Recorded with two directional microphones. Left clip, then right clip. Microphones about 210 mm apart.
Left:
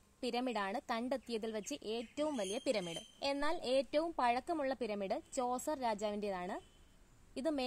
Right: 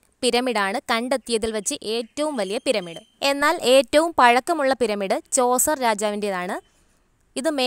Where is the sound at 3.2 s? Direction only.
45° right (ahead or behind).